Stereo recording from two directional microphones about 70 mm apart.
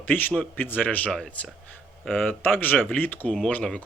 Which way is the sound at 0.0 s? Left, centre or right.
Left.